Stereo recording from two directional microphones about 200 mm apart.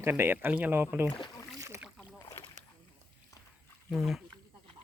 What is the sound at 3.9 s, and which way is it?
Speech, centre (ahead or behind).